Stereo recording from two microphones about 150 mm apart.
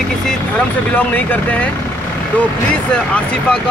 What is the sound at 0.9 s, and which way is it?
Speech, 10° left (ahead or behind).